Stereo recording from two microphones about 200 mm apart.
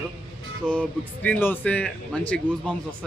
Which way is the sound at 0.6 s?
5° left (ahead or behind).